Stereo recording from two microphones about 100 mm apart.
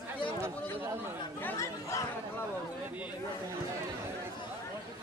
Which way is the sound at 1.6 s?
30° left (ahead or behind).